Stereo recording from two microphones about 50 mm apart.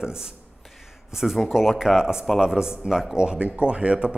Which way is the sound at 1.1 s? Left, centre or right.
Centre.